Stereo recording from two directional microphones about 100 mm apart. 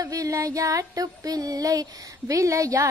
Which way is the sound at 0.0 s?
40° right (ahead or behind).